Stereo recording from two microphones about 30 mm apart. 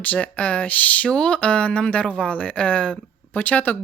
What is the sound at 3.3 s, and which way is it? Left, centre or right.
Speech, left.